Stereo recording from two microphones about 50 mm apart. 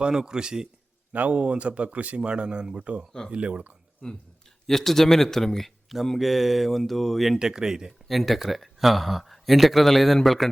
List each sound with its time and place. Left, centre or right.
0.0 s a man's voice: centre
1.1 s speech: right
4.6 s speech: centre
7.3 s a man's voice: centre
8.0 s speech: centre